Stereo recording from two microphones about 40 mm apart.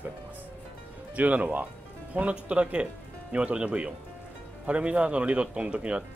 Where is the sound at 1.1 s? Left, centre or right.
Right.